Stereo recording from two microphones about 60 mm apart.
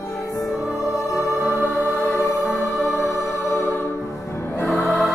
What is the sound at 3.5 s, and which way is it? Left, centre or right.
Music, left.